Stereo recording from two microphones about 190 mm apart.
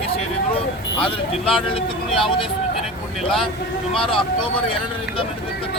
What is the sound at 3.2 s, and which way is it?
Speech, centre (ahead or behind).